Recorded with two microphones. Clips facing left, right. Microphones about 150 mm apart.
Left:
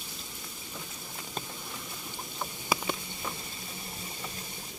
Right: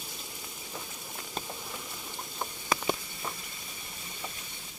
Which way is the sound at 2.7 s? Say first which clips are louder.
Even; 10° left (ahead or behind).